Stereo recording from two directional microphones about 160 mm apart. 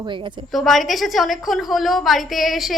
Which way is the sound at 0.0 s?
30° right (ahead or behind).